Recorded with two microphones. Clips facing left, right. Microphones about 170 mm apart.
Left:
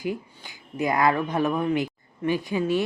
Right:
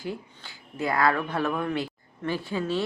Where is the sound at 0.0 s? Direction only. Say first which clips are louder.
Left 5 dB; 15° left (ahead or behind).